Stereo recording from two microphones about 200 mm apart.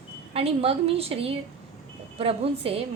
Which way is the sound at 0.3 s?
30° right (ahead or behind).